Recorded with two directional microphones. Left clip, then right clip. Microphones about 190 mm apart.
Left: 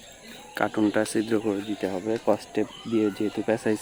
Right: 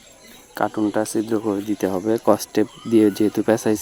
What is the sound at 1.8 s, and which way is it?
Speech, 25° right (ahead or behind).